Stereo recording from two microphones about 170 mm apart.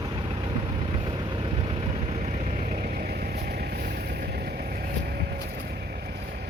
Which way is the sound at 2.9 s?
60° right (ahead or behind).